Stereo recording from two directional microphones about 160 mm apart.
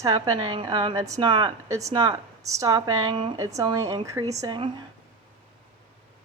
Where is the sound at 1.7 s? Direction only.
20° right (ahead or behind).